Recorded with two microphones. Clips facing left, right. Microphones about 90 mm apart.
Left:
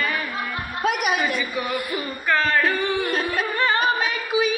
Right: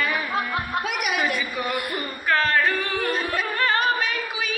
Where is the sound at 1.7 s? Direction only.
60° right (ahead or behind).